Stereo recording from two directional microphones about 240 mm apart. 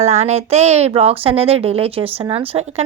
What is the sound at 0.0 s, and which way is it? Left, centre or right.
Speech, right.